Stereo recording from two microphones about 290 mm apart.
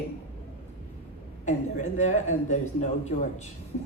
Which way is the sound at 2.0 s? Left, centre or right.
Left.